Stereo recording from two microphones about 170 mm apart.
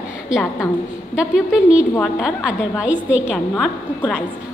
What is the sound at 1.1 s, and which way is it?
A woman's voice, 5° right (ahead or behind).